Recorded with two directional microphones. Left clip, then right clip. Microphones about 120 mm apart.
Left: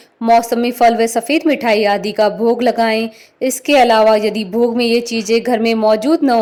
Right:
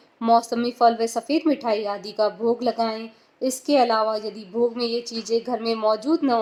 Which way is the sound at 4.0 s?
50° left (ahead or behind).